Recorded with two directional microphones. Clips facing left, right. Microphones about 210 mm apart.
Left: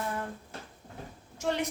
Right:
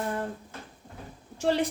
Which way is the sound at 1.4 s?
30° right (ahead or behind).